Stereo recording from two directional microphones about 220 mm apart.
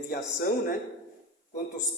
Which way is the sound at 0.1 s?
40° left (ahead or behind).